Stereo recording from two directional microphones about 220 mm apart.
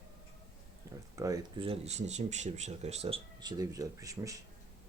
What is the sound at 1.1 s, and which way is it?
Speech, 15° right (ahead or behind).